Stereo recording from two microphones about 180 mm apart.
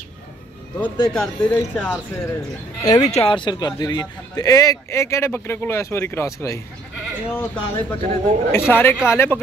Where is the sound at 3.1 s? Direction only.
30° left (ahead or behind).